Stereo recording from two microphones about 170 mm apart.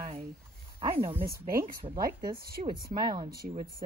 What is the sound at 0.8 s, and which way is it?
Speech, 15° right (ahead or behind).